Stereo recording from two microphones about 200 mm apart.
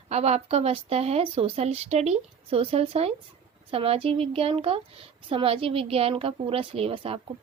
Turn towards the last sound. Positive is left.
turn(degrees=-30)  # may be behind; listen again after turning